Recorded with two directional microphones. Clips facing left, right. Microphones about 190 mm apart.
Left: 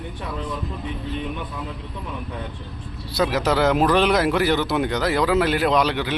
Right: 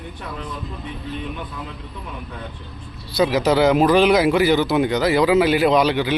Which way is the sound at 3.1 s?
Centre (ahead or behind).